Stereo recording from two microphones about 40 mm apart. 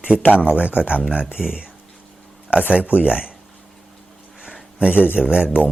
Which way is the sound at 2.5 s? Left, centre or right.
Right.